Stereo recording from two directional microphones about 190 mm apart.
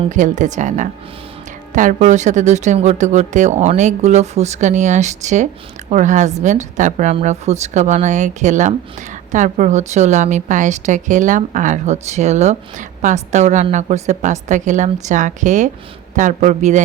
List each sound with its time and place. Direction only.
0.0 s a woman's voice: 40° right (ahead or behind)